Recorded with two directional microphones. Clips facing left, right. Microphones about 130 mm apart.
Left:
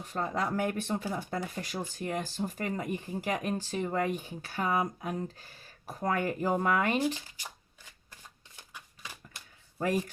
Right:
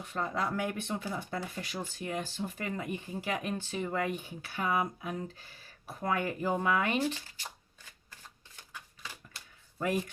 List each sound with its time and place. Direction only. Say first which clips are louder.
0.0 s speech: left 1 dB; 40° left (ahead or behind)